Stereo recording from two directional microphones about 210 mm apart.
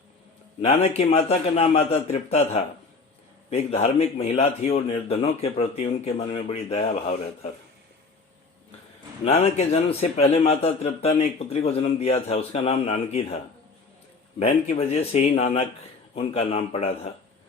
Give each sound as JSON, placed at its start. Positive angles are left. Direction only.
{"t": 0.6, "sound": "a man's voice", "side_deg": 30}
{"t": 9.2, "sound": "a man's voice", "side_deg": 30}